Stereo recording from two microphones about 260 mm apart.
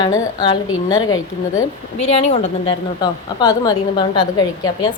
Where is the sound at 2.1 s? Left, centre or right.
Left.